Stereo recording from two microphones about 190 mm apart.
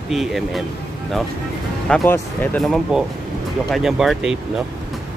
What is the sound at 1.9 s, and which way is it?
Speech, 10° left (ahead or behind).